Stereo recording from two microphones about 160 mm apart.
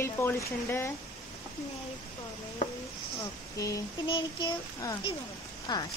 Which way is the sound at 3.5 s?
20° left (ahead or behind).